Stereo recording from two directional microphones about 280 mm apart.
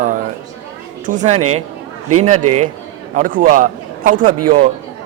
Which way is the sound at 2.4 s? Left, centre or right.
Right.